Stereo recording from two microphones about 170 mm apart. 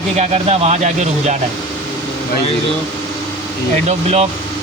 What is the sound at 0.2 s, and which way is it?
Speech, 35° right (ahead or behind).